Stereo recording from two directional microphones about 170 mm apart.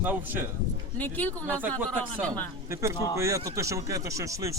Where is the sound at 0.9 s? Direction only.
10° left (ahead or behind).